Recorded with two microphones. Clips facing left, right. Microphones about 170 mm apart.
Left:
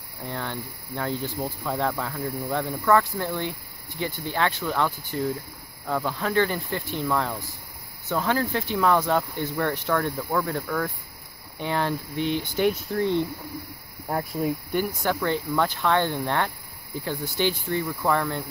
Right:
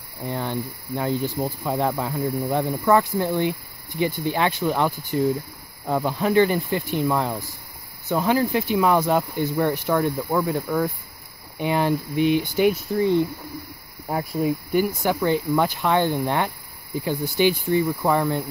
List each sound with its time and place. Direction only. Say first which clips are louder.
0.2 s speech: right 5 dB; 15° right (ahead or behind)